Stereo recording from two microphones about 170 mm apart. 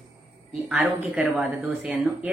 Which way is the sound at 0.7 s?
5° right (ahead or behind).